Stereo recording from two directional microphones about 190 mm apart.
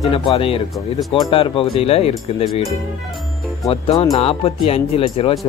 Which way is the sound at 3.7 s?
30° left (ahead or behind).